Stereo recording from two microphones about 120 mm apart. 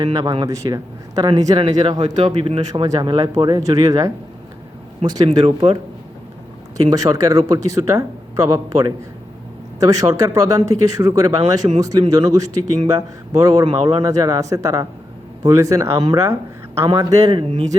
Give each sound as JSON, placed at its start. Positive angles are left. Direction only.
{"t": 0.0, "sound": "a man's voice", "side_deg": -30}
{"t": 6.7, "sound": "a man's voice", "side_deg": -30}